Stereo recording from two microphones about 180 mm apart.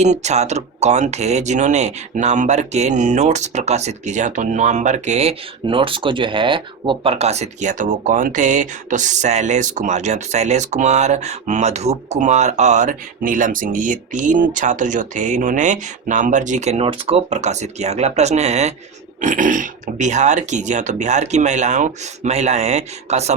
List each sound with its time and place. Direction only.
0.0 s speech: 40° right (ahead or behind)